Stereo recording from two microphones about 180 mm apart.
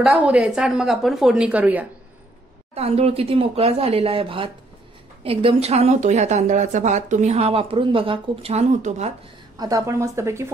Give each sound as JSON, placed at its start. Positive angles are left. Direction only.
{"t": 0.0, "sound": "speech", "side_deg": -5}
{"t": 2.7, "sound": "speech", "side_deg": -35}
{"t": 9.6, "sound": "speech", "side_deg": -20}